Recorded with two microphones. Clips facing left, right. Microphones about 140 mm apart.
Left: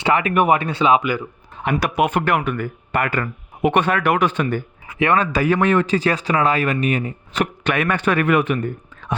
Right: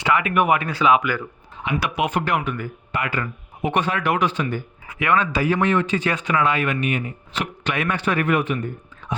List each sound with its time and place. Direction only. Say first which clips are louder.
0.0 s speech: left 2 dB; 35° left (ahead or behind)
1.7 s speech: left 4 dB; 50° left (ahead or behind)
4.9 s speech: left 3 dB; 35° left (ahead or behind)
7.6 s speech: left 2 dB; 55° left (ahead or behind); by 8.5 s 70° left (ahead or behind)
8.5 s speech: left 4 dB; 55° left (ahead or behind)